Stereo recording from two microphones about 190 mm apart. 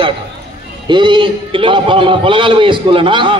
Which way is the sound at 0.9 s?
25° right (ahead or behind).